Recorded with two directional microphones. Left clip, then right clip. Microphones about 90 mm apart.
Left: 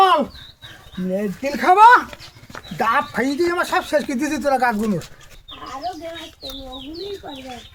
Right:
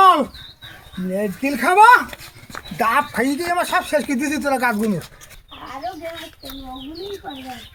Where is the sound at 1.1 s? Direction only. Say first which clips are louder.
Right 1 dB; 5° left (ahead or behind).